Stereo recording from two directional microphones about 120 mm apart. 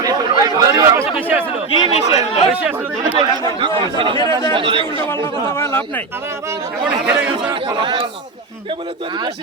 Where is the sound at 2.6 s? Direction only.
15° right (ahead or behind).